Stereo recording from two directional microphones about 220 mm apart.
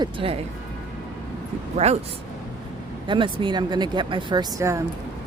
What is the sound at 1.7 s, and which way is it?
Speech, 30° right (ahead or behind).